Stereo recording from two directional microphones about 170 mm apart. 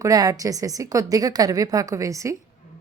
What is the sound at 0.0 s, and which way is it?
A woman's voice, 20° right (ahead or behind).